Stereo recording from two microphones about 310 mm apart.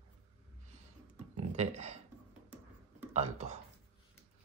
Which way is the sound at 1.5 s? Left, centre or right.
Right.